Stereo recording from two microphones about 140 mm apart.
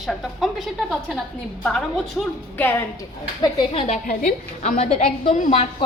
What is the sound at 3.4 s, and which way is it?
Speech, 35° left (ahead or behind).